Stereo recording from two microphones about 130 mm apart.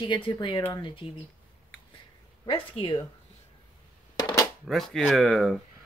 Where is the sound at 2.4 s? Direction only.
40° left (ahead or behind).